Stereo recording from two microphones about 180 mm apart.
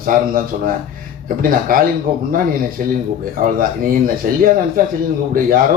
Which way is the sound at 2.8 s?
50° right (ahead or behind).